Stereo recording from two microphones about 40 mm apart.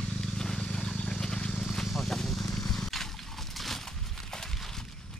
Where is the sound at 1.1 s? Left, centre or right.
Centre.